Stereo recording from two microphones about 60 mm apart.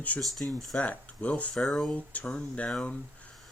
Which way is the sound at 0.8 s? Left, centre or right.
Left.